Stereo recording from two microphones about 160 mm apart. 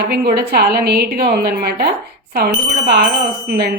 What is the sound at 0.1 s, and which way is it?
A woman's voice, 80° right.